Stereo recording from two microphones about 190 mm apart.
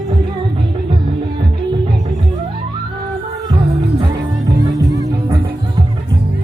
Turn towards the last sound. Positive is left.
turn(degrees=-20)  # may be behind; listen again after turning